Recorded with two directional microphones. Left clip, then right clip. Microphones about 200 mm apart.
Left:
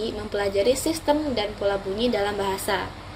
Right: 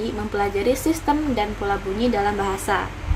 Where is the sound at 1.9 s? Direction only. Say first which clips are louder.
Right 2 dB; 10° right (ahead or behind).